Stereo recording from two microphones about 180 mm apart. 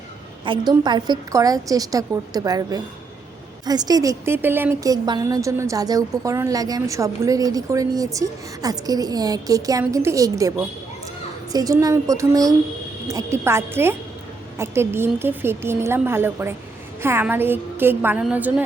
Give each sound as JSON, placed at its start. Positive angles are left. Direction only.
{"t": 0.4, "sound": "a woman's voice", "side_deg": -25}